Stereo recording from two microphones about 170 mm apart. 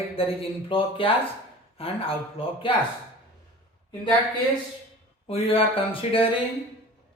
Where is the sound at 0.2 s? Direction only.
35° left (ahead or behind).